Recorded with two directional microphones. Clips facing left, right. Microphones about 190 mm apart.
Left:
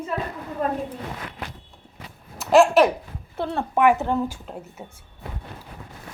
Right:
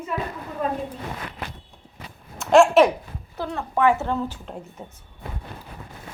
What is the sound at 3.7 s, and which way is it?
Speech, 15° left (ahead or behind).